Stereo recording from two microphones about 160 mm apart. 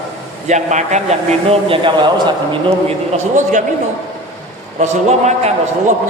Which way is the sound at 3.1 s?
50° right (ahead or behind).